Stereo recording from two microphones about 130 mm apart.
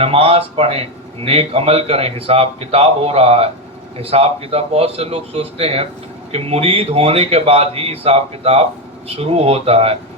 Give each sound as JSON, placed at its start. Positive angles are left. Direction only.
{"t": 0.0, "sound": "a man's voice", "side_deg": -45}